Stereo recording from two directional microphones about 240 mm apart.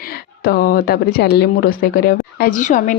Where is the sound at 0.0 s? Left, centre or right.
Left.